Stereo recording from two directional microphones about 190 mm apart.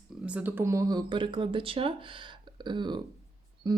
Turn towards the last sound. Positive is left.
turn(degrees=-20)  # may be behind; listen again after turning